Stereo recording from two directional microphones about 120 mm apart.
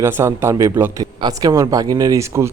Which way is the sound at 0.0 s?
20° right (ahead or behind).